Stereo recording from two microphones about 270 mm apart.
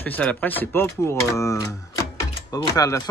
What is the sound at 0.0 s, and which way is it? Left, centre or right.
Speech, centre.